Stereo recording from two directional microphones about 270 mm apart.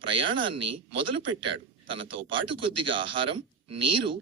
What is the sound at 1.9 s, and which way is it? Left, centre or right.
Speech, centre.